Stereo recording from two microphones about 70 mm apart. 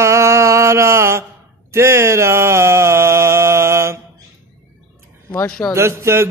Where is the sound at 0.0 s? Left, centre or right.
Right.